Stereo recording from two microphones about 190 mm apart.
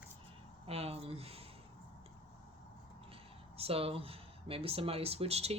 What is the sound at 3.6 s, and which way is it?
Speech, 30° right (ahead or behind).